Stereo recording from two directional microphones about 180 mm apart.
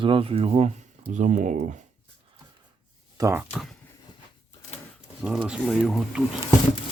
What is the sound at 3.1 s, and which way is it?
Speech, 15° right (ahead or behind).